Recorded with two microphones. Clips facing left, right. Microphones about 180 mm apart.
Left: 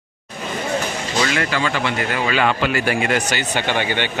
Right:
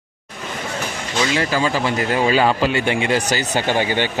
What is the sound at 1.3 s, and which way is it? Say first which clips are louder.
Speech: right 2 dB; 30° right (ahead or behind).